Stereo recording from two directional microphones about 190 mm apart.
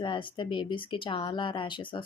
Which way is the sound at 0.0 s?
25° left (ahead or behind).